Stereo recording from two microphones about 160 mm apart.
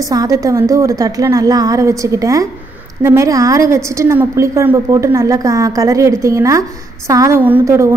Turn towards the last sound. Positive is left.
turn(degrees=-15)  # may be behind; listen again after turning